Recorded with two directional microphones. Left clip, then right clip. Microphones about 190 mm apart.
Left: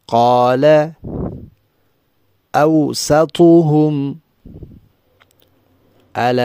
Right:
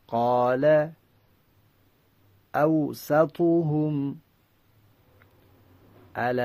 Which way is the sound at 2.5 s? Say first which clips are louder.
Left 10 dB; 55° left (ahead or behind).